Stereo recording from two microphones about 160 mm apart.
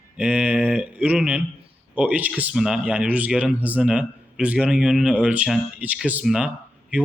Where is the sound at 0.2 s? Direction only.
5° right (ahead or behind).